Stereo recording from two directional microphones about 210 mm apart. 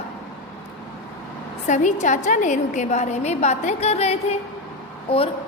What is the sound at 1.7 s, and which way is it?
A woman's voice, 35° left (ahead or behind).